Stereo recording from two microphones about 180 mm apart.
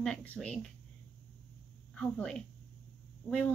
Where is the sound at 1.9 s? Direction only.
5° left (ahead or behind).